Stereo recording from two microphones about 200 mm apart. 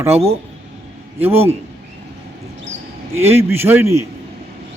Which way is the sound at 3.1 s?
10° right (ahead or behind).